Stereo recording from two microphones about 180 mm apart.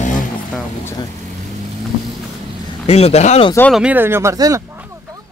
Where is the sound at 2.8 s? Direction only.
35° left (ahead or behind).